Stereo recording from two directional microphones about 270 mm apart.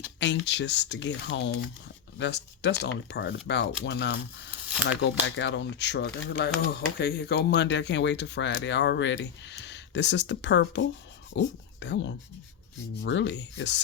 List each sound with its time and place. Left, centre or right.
0.2 s speech: left